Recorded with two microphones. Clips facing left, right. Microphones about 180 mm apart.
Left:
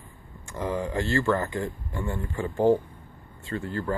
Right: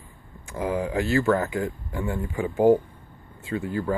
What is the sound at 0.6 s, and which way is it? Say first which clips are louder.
Speech: right 3 dB; 10° right (ahead or behind).